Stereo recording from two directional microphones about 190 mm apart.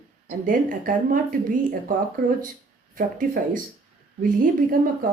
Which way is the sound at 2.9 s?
45° right (ahead or behind).